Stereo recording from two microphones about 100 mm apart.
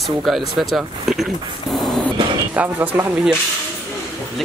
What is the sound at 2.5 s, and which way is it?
Speech, 15° right (ahead or behind).